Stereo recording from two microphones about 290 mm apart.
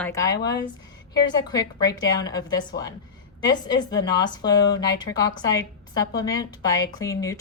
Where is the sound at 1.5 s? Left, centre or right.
Centre.